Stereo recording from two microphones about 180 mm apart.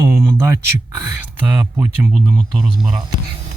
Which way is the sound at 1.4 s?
20° right (ahead or behind).